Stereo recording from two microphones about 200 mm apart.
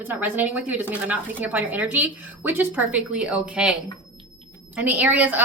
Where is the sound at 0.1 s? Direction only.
10° right (ahead or behind).